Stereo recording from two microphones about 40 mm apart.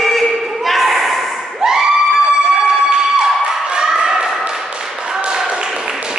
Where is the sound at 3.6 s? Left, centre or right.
Right.